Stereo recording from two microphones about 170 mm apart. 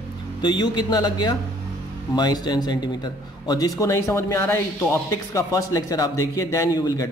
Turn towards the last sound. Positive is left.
turn(degrees=20)  # may be behind; listen again after turning